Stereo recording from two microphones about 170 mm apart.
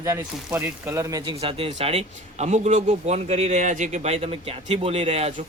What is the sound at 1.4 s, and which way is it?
A man's voice, 30° right (ahead or behind).